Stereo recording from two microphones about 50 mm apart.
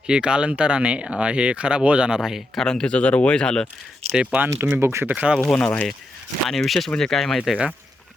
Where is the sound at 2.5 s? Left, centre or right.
Centre.